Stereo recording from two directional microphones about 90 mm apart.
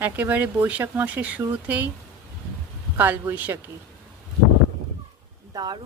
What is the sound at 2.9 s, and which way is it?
Speech, 25° right (ahead or behind).